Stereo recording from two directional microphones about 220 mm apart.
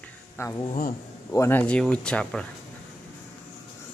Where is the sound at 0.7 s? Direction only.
40° left (ahead or behind).